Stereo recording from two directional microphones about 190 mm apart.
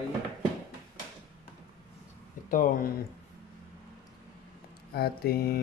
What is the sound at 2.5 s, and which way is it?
Mantra, 45° left (ahead or behind).